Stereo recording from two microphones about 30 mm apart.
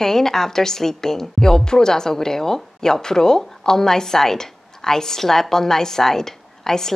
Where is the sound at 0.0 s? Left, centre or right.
Centre.